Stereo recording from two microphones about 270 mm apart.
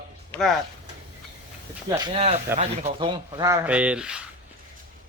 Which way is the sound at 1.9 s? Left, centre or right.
Centre.